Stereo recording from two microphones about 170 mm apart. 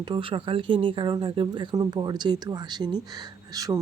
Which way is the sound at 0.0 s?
30° right (ahead or behind).